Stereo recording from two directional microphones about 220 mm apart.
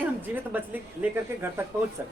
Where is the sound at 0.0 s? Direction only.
10° right (ahead or behind).